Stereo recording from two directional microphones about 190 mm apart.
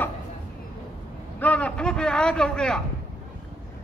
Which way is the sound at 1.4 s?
5° left (ahead or behind).